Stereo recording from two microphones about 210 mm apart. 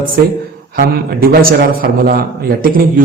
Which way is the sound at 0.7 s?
45° right (ahead or behind).